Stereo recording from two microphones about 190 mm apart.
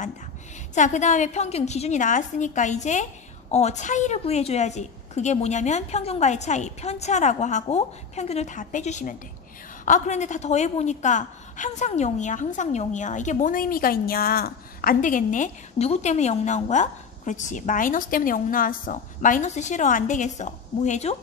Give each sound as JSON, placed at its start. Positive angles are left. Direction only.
{"t": 0.7, "sound": "a woman's voice", "side_deg": 40}